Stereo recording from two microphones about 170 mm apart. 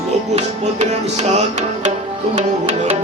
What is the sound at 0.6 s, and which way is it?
Music, 40° right (ahead or behind).